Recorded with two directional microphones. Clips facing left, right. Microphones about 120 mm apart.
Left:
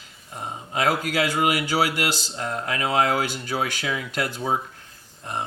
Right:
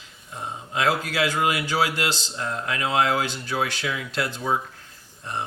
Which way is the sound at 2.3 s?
40° left (ahead or behind).